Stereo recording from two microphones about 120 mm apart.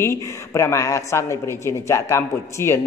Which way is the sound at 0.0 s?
25° left (ahead or behind).